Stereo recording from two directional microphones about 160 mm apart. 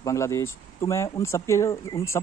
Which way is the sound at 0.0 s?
20° left (ahead or behind).